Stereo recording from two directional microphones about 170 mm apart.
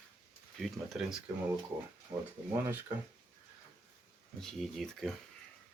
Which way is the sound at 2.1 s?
25° right (ahead or behind).